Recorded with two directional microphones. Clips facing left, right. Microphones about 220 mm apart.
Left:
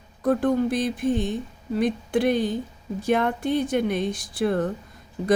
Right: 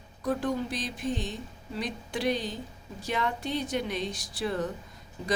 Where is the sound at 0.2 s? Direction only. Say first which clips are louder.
Left 8 dB; 55° left (ahead or behind).